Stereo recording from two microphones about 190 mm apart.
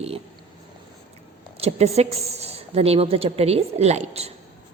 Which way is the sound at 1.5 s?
35° right (ahead or behind).